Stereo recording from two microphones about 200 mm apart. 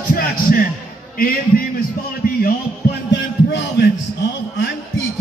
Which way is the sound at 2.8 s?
50° left (ahead or behind).